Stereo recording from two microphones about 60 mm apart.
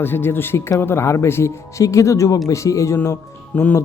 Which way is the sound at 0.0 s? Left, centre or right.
Left.